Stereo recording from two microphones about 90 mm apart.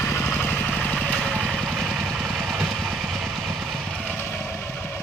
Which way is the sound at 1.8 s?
5° right (ahead or behind).